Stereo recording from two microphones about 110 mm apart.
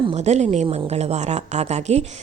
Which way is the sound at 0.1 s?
90° right.